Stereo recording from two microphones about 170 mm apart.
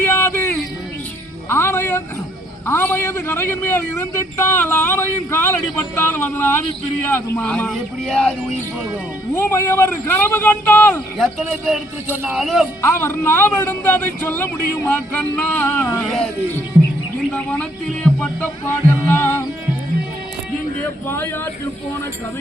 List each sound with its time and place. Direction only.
0.0 s a sound: 10° left (ahead or behind)
1.5 s music: 15° left (ahead or behind)
2.6 s a man's voice: 10° left (ahead or behind)
9.3 s a man's voice: 15° left (ahead or behind)
12.0 s speech: 10° right (ahead or behind)
12.4 s speech: centre (ahead or behind)
12.8 s a man's voice: 15° left (ahead or behind)
17.3 s speech: 10° left (ahead or behind)
21.1 s a man's voice: 15° left (ahead or behind)